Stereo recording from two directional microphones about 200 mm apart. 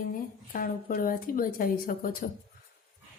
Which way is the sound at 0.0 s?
45° left (ahead or behind).